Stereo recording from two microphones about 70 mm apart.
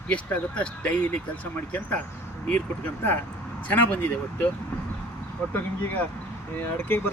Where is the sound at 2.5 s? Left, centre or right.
Left.